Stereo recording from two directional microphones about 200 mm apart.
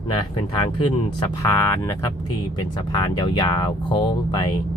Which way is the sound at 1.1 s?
15° left (ahead or behind).